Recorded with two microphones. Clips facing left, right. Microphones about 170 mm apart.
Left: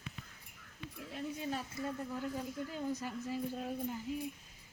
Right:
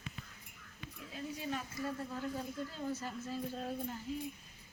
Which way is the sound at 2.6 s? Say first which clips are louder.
Left 2 dB; 15° left (ahead or behind).